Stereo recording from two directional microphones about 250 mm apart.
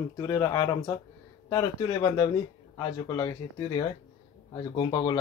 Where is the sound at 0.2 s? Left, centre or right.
Centre.